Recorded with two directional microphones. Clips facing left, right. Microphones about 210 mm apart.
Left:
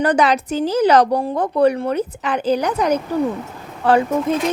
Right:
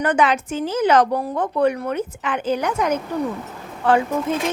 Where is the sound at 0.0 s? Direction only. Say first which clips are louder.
Left 3 dB; 35° left (ahead or behind).